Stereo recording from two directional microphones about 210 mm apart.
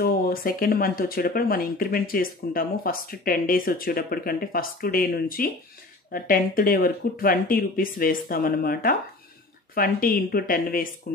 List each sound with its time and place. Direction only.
0.0 s speech: 45° left (ahead or behind)